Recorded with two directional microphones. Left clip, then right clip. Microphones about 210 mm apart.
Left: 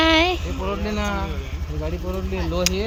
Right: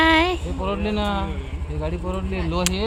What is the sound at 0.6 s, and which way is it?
Speech, 60° right (ahead or behind).